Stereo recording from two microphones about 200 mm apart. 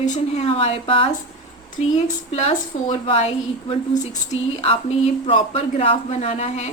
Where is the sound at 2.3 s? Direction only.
35° left (ahead or behind).